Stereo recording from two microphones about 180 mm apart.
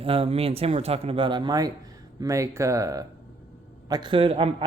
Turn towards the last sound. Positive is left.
turn(degrees=-30)  # may be behind; listen again after turning